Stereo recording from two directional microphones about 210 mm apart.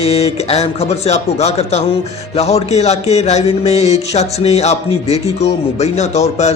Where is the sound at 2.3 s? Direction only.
30° left (ahead or behind).